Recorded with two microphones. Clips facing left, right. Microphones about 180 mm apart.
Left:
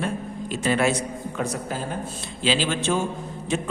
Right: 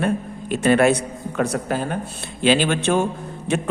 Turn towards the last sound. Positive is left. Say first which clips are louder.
# right 3 dB
turn(degrees=-65)  # may be behind; listen again after turning